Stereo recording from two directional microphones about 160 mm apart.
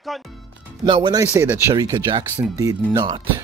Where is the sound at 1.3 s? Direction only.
15° right (ahead or behind).